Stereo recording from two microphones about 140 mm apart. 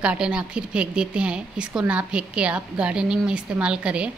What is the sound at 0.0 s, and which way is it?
A woman's voice, 10° right (ahead or behind).